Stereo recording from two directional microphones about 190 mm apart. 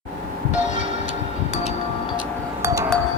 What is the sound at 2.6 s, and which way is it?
Glass, 15° right (ahead or behind).